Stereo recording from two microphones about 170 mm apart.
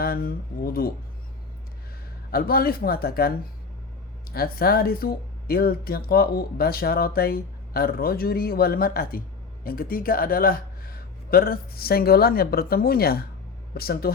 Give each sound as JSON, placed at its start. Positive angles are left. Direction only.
{"t": 0.0, "sound": "speech", "side_deg": 60}
{"t": 2.3, "sound": "speech", "side_deg": 60}
{"t": 4.4, "sound": "speech", "side_deg": 60}